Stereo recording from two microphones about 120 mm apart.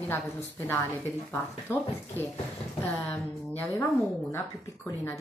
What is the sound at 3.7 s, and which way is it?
A woman's voice, 25° left (ahead or behind).